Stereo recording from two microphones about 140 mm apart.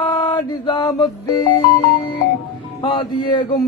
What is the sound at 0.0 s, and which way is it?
Mantra, 35° left (ahead or behind).